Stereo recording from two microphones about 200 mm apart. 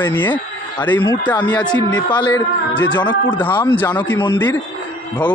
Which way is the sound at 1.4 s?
20° left (ahead or behind).